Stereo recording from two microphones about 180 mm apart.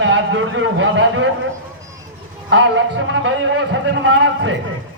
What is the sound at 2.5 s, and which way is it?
A man's voice, 90° right.